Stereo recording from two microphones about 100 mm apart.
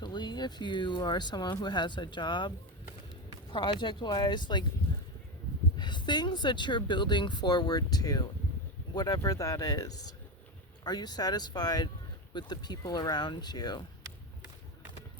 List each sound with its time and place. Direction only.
0.0 s speech: 50° left (ahead or behind)
3.5 s speech: 50° left (ahead or behind)
5.7 s speech: 50° left (ahead or behind)